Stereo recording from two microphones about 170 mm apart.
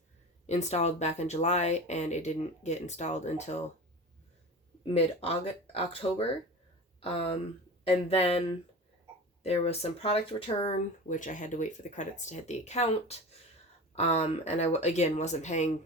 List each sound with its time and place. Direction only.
0.4 s speech: 40° left (ahead or behind)
4.9 s speech: 35° left (ahead or behind)